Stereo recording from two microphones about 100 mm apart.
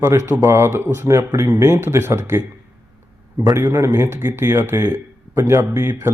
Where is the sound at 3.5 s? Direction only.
25° right (ahead or behind).